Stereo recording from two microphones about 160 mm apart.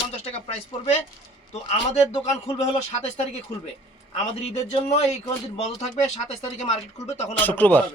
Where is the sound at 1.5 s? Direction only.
40° left (ahead or behind).